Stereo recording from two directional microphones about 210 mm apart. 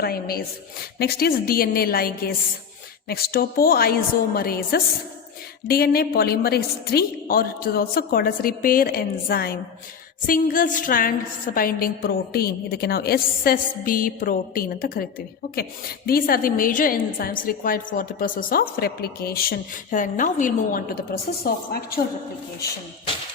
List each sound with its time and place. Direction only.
0.0 s a woman's voice: 45° left (ahead or behind)
16.0 s a woman's voice: 45° left (ahead or behind)